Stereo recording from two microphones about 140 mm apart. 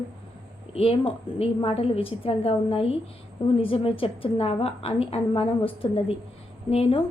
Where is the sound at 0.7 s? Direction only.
45° left (ahead or behind).